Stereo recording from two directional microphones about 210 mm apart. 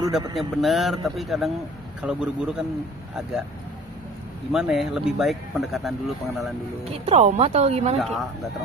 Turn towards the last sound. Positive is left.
turn(degrees=-30)  # may be behind; listen again after turning